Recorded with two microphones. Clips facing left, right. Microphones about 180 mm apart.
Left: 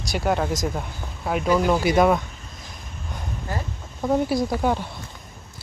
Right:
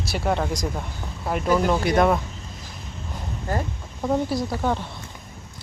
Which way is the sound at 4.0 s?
10° left (ahead or behind).